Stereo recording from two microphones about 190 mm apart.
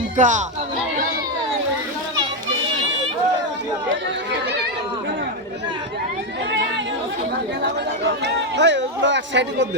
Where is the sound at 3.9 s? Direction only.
65° right (ahead or behind).